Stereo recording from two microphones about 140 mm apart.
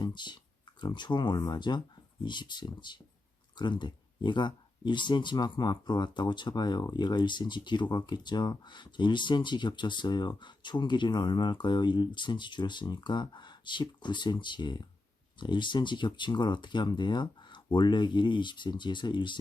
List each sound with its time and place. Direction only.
0.0 s speech: 30° left (ahead or behind)